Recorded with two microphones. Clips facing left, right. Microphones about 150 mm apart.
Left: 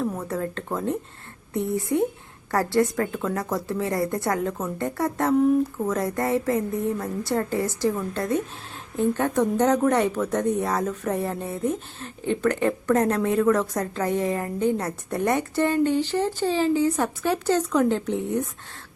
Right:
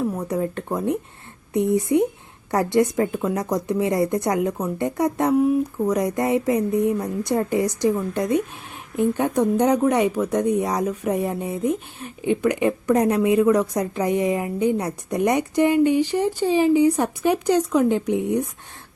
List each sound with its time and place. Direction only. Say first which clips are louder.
0.0 s a woman's voice: right 3 dB; 15° right (ahead or behind)